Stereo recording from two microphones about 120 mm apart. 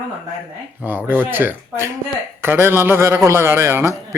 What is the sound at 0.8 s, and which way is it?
A man's voice, 20° right (ahead or behind).